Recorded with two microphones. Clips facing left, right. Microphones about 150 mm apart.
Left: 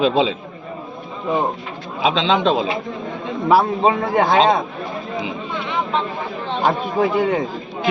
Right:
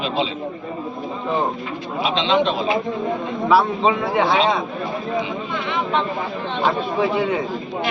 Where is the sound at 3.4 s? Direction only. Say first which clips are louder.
Left 2 dB; 45° left (ahead or behind).